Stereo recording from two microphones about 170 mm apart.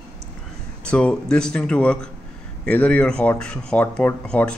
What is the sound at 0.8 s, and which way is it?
A man's voice, 5° left (ahead or behind).